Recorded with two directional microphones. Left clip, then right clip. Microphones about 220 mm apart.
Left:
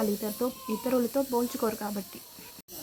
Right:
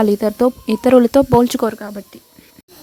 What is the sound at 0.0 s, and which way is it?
Speech, 45° right (ahead or behind).